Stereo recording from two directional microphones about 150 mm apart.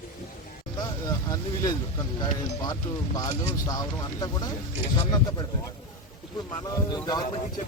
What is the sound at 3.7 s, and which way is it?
Speech, 25° left (ahead or behind).